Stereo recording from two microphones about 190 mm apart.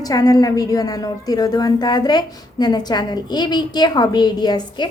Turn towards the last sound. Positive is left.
turn(degrees=20)  # may be behind; listen again after turning